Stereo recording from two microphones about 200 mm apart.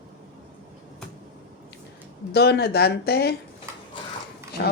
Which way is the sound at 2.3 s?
55° left (ahead or behind).